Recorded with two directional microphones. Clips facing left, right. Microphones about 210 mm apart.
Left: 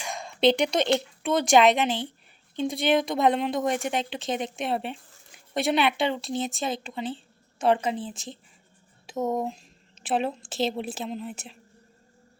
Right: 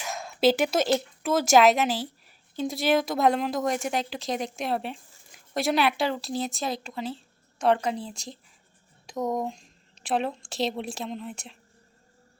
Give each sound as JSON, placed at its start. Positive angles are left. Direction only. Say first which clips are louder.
{"t": 0.0, "sound": "a woman's voice", "louder": "even", "side_deg": -5}